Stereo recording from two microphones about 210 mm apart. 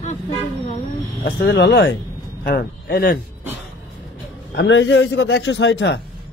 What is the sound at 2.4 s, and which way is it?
Speech, 45° left (ahead or behind).